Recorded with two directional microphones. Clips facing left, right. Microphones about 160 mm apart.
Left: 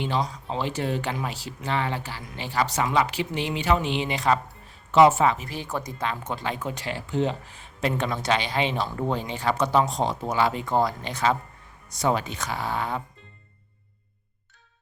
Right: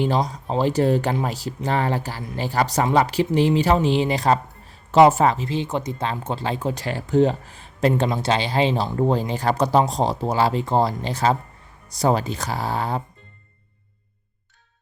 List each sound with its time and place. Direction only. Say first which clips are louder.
0.0 s speech: right 5 dB; 40° right (ahead or behind)
5.5 s speech: right 7 dB; 25° right (ahead or behind)